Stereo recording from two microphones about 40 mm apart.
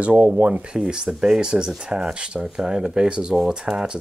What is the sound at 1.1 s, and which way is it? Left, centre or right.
Speech, centre.